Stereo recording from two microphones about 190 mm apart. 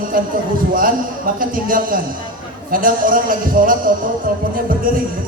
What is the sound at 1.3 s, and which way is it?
A man's voice, 45° right (ahead or behind).